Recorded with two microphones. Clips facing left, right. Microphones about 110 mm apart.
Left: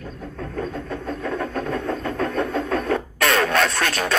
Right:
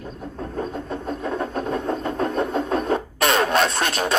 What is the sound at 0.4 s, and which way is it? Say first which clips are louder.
Vehicle: even; 25° right (ahead or behind).